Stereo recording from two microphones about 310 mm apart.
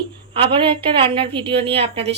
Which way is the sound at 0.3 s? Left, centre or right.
Centre.